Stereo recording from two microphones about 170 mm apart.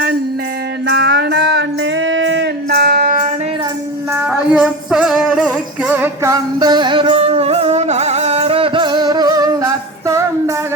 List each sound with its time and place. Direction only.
0.9 s music: 75° right (ahead or behind)
2.0 s music: 90° right; by 3.2 s 60° right (ahead or behind)
4.3 s music: 5° right (ahead or behind)
5.9 s music: 10° right (ahead or behind)
6.6 s music: 25° right (ahead or behind)